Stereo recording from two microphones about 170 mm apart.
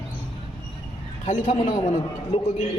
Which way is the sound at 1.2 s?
35° left (ahead or behind).